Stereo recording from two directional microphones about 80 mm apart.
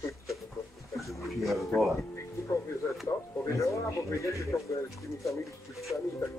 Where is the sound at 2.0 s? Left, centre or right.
Left.